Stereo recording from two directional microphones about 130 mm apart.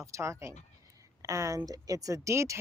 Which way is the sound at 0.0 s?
20° right (ahead or behind).